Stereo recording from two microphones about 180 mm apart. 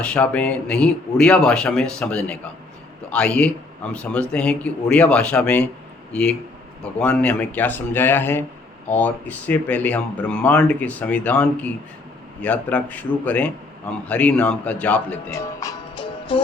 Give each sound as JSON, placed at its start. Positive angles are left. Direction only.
{"t": 0.0, "sound": "speech", "side_deg": 5}
{"t": 7.0, "sound": "speech", "side_deg": 5}
{"t": 15.3, "sound": "speech", "side_deg": 20}